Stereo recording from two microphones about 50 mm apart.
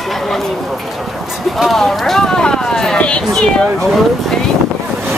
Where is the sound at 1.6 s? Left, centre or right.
Centre.